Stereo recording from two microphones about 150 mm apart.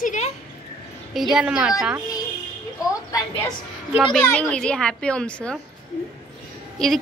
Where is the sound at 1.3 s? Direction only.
5° right (ahead or behind).